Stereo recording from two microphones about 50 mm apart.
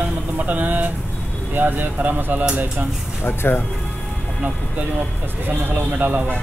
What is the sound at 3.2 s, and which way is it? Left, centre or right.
Speech, left.